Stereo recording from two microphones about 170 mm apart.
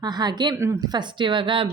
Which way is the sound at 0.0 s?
25° right (ahead or behind).